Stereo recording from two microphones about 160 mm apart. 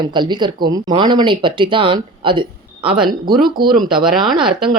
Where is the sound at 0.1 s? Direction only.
30° right (ahead or behind).